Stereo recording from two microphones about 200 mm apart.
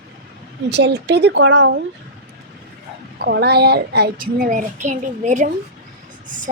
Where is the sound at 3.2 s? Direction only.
55° right (ahead or behind); by 5.5 s 40° right (ahead or behind).